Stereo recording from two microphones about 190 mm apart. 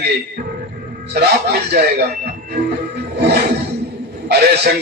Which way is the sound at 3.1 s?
60° right (ahead or behind).